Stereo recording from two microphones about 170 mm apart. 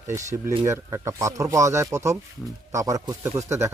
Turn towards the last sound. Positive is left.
turn(degrees=-15)  # may be behind; listen again after turning